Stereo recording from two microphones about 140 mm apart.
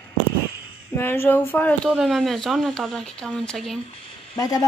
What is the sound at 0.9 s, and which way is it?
Speech, 15° left (ahead or behind).